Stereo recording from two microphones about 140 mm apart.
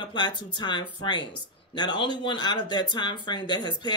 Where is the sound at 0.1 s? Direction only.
30° left (ahead or behind).